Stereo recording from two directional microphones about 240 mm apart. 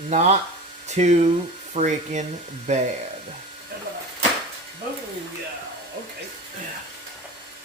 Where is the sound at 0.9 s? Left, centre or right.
Right.